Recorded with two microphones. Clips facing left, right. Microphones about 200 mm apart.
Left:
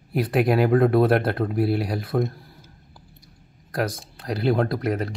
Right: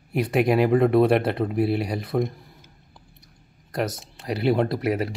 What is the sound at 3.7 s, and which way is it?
Speech, centre (ahead or behind).